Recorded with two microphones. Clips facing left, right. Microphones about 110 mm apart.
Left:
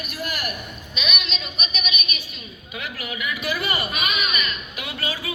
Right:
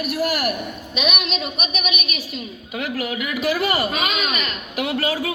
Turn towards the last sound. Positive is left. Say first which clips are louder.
# right 5 dB
turn(degrees=-85)